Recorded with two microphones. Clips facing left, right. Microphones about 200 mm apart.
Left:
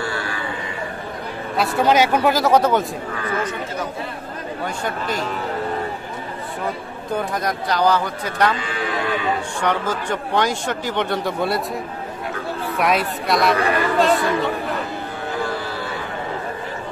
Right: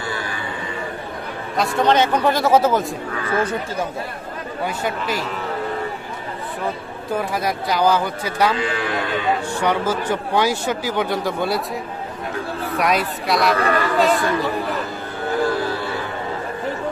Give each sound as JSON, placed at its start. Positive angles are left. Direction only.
{"t": 0.0, "sound": "a sound", "side_deg": -20}
{"t": 1.6, "sound": "speech", "side_deg": 10}
{"t": 4.6, "sound": "speech", "side_deg": -5}
{"t": 7.2, "sound": "speech", "side_deg": -5}
{"t": 9.6, "sound": "speech", "side_deg": -10}
{"t": 12.7, "sound": "speech", "side_deg": 0}